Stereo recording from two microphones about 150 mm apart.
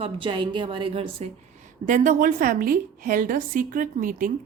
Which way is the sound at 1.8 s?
55° right (ahead or behind).